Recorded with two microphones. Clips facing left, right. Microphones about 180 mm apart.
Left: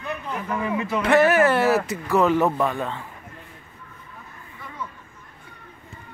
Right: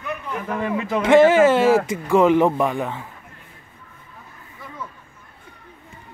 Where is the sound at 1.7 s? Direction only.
90° right.